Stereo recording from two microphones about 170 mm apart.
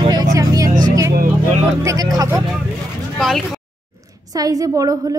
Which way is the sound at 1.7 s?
20° right (ahead or behind).